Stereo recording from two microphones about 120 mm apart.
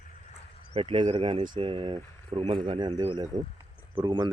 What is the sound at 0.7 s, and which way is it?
Speech, 50° right (ahead or behind).